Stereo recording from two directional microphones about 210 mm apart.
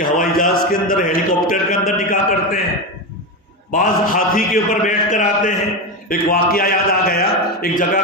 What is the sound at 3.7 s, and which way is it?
A man's voice, 40° left (ahead or behind).